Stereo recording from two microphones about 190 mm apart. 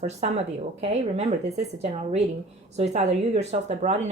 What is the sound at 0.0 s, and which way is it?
Speech, 35° right (ahead or behind).